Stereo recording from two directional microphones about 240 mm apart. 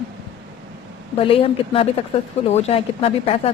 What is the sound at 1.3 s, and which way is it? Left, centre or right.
Speech, left.